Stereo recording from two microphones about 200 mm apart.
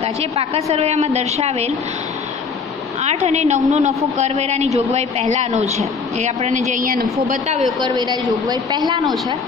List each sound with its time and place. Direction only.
0.0 s a woman's voice: 30° right (ahead or behind)
3.0 s a woman's voice: 35° right (ahead or behind)
7.8 s a woman's voice: 20° right (ahead or behind)